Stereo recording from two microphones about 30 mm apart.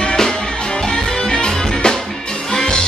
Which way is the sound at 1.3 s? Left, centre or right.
Left.